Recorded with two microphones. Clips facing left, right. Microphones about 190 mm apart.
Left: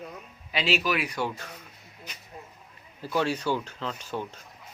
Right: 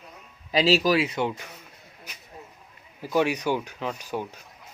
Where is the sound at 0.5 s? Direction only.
35° right (ahead or behind).